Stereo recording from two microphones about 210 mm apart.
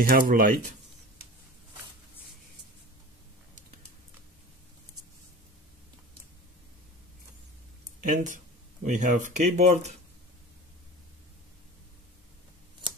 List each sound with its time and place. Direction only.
0.0 s speech: 45° right (ahead or behind)
8.0 s speech: 40° right (ahead or behind)
12.8 s a sound: 25° right (ahead or behind)